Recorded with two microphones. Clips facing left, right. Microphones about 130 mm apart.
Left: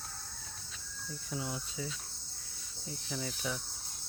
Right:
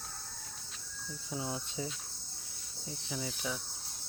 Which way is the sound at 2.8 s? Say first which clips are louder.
Even; 10° right (ahead or behind).